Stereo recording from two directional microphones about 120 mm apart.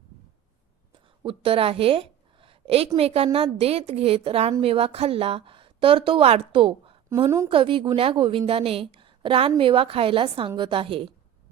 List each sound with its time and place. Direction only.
0.9 s a woman's voice: 45° right (ahead or behind)
7.3 s a woman's voice: 25° right (ahead or behind)
7.5 s a woman's voice: 45° right (ahead or behind)